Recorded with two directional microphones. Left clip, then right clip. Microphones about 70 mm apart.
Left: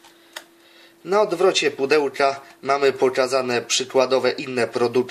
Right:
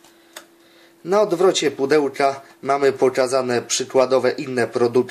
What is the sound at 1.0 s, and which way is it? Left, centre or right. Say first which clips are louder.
Speech: right 2 dB; right.